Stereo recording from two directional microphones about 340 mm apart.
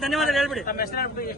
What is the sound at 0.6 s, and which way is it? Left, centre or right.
Speech, left.